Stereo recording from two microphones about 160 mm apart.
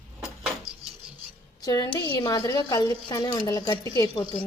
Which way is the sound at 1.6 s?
25° left (ahead or behind).